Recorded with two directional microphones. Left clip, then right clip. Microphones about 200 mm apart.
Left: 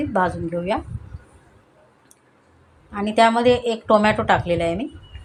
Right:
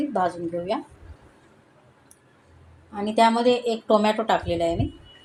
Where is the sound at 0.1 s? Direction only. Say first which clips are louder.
Left 3 dB; 20° left (ahead or behind).